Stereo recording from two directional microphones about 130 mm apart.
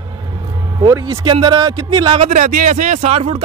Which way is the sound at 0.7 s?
30° right (ahead or behind).